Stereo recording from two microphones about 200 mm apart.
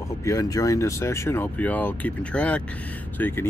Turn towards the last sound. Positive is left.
turn(degrees=10)  # may be behind; listen again after turning